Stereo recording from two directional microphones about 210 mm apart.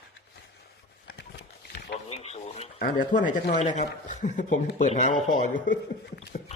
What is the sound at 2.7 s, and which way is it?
Speech, 45° left (ahead or behind).